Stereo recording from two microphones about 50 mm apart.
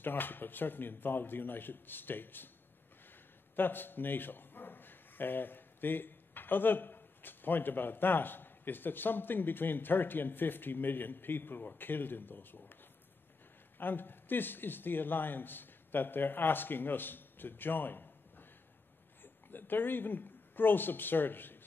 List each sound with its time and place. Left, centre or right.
0.0 s a man's voice: left
13.7 s speech: left